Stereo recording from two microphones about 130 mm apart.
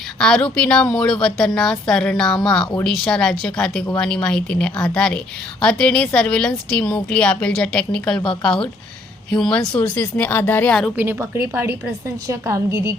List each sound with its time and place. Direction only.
0.2 s a woman's voice: 5° left (ahead or behind)
10.9 s a woman's voice: 15° right (ahead or behind)
12.3 s a woman's voice: 25° right (ahead or behind)